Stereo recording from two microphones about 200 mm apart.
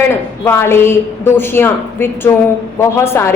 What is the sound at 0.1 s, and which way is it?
A woman's voice, 10° left (ahead or behind).